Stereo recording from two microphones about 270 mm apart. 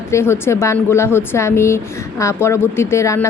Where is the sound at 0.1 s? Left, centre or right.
Centre.